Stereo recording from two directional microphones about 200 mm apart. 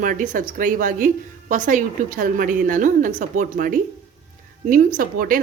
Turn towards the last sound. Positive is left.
turn(degrees=-45)  # may be behind; listen again after turning